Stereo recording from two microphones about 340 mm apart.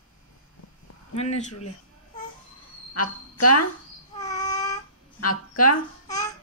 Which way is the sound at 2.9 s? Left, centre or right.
Left.